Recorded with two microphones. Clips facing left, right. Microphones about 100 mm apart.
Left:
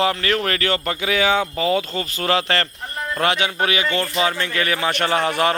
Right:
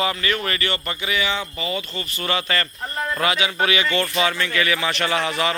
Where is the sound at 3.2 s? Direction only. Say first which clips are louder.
Left 3 dB; 55° left (ahead or behind).